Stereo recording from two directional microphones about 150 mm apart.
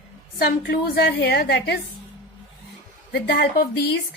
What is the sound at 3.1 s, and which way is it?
Speech, 90° left.